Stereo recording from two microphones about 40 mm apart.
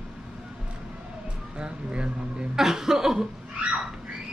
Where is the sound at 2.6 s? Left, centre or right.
Centre.